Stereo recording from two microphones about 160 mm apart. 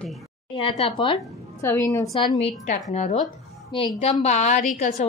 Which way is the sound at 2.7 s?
45° left (ahead or behind).